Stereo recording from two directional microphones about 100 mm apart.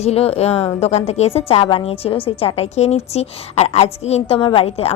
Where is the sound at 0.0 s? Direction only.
90° left; by 2.3 s 70° left (ahead or behind).